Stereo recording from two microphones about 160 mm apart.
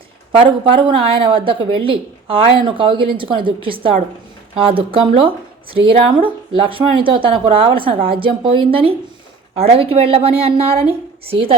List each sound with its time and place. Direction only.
0.3 s speech: 30° right (ahead or behind)